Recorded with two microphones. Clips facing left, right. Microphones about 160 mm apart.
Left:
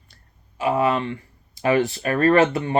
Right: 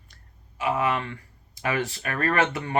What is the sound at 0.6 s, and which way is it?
Speech, 30° left (ahead or behind).